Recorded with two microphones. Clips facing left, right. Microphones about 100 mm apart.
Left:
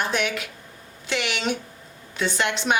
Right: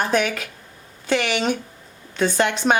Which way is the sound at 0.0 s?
40° right (ahead or behind).